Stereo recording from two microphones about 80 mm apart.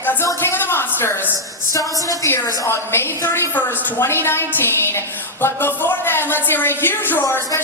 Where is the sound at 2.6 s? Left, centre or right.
Left.